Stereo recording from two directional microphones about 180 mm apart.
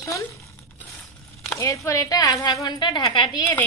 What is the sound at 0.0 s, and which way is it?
Crumpling, 15° left (ahead or behind).